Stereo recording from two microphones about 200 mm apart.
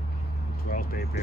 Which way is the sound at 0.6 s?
45° left (ahead or behind).